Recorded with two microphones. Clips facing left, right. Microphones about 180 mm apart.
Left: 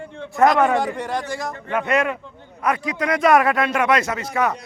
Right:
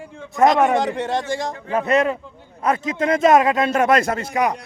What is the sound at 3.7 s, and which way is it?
Speech, 45° right (ahead or behind).